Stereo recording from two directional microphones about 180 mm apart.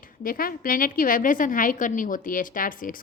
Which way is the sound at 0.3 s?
50° left (ahead or behind).